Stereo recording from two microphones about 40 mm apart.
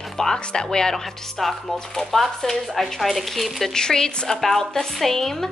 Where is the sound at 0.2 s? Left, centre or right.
Centre.